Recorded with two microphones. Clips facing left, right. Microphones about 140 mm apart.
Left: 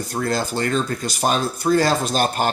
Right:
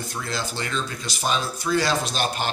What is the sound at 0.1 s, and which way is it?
Speech, 45° left (ahead or behind).